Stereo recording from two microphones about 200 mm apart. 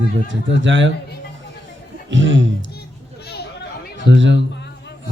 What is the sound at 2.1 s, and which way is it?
Speech, 65° right (ahead or behind).